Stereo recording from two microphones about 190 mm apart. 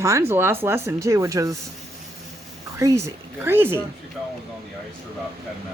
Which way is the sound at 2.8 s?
15° right (ahead or behind).